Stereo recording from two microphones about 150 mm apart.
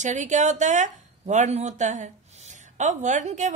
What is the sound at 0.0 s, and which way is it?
A woman's voice, 55° right (ahead or behind).